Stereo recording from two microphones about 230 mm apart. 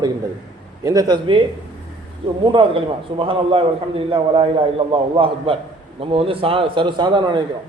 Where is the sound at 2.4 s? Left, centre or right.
Right.